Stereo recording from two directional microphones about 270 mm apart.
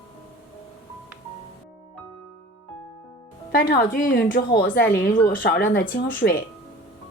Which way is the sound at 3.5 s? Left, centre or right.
Left.